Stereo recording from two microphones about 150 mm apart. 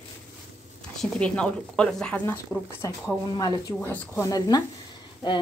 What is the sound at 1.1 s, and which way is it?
A woman's voice, 5° left (ahead or behind).